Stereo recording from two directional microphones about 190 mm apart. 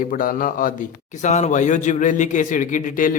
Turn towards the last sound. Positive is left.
turn(degrees=45)  # may be behind; listen again after turning